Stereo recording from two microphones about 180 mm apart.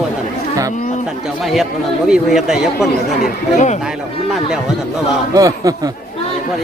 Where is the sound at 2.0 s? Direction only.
5° right (ahead or behind).